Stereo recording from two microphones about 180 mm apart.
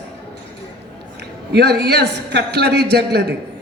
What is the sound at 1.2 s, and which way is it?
A man's voice, 65° right (ahead or behind).